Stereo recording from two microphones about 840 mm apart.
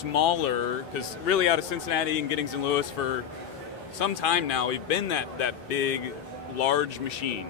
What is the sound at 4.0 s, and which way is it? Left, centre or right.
A man's voice, left.